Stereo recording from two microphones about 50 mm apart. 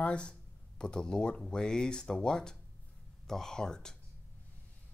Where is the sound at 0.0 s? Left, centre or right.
Left.